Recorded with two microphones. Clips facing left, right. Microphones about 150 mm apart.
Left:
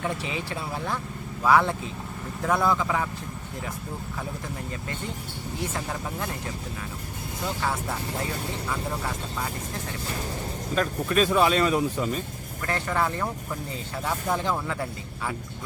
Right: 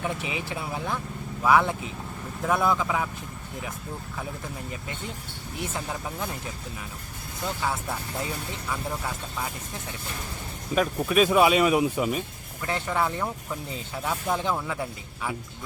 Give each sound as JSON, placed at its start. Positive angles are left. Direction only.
{"t": 0.0, "sound": "speech", "side_deg": -15}
{"t": 5.5, "sound": "speech", "side_deg": -15}
{"t": 10.8, "sound": "speech", "side_deg": -10}